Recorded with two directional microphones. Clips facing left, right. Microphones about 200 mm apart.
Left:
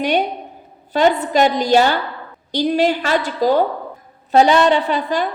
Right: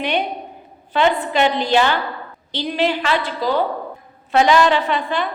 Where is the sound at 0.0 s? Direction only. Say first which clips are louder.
Left 3 dB; 40° left (ahead or behind).